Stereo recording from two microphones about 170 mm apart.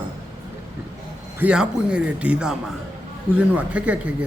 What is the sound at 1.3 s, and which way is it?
A man's voice, 5° right (ahead or behind).